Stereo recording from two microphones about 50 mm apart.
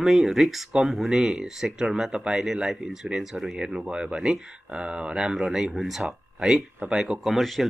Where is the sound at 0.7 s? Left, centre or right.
Centre.